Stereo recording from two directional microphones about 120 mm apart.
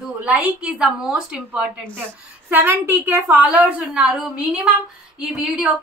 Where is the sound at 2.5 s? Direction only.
15° right (ahead or behind).